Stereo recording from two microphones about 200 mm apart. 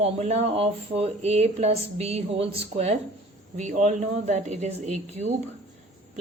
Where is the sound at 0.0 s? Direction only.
30° right (ahead or behind).